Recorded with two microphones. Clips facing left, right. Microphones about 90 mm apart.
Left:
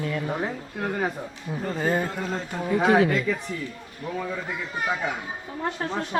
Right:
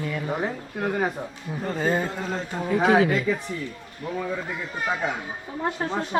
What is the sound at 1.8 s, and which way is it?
Speech, 25° right (ahead or behind).